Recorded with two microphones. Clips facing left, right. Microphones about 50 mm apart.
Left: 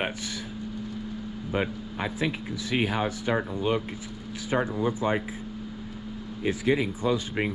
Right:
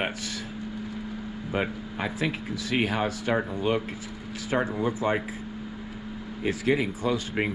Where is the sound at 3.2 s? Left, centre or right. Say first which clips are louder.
Right 1 dB; right.